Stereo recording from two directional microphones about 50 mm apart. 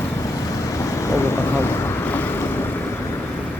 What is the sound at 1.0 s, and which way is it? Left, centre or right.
Speech, left.